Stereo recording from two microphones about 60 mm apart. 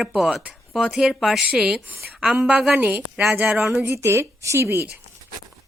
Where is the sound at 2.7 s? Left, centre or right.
Right.